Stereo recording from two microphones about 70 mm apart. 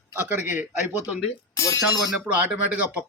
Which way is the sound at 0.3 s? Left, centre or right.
Right.